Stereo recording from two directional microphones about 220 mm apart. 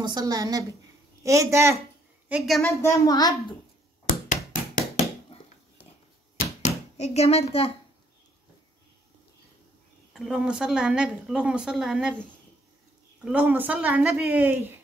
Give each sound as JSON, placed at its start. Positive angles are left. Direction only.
{"t": 0.0, "sound": "speech", "side_deg": -20}
{"t": 2.8, "sound": "a child's voice", "side_deg": 15}
{"t": 4.5, "sound": "a sound", "side_deg": 35}
{"t": 7.0, "sound": "speech", "side_deg": 30}
{"t": 10.1, "sound": "speech", "side_deg": 0}